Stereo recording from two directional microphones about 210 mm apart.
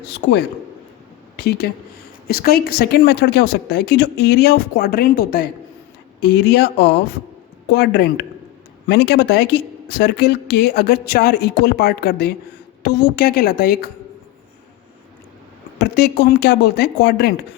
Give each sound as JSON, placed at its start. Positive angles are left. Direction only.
{"t": 0.1, "sound": "a woman's voice", "side_deg": 50}
{"t": 15.8, "sound": "a woman's voice", "side_deg": 50}